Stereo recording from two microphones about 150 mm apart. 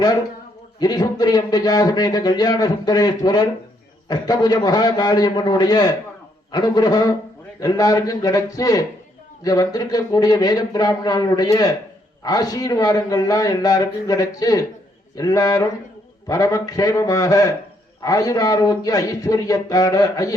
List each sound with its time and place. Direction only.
0.8 s speech: 25° left (ahead or behind)